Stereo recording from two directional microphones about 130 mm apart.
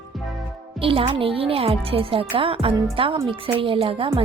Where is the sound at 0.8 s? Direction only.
45° right (ahead or behind).